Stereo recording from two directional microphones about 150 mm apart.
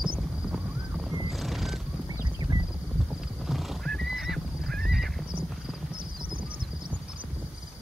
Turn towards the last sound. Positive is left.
turn(degrees=-70)  # may be behind; listen again after turning